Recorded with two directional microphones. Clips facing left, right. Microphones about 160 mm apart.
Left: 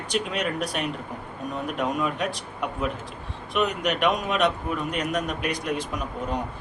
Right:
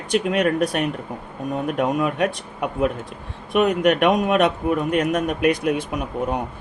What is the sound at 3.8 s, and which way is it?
Speech, 50° right (ahead or behind).